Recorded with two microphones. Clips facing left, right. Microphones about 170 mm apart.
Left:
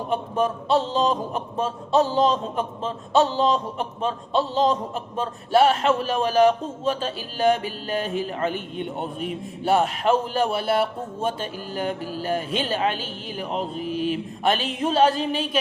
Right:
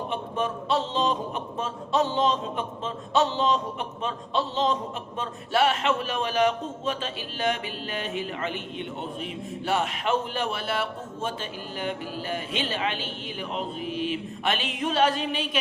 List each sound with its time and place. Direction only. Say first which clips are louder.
0.1 s a man's voice: left 8 dB; 40° left (ahead or behind)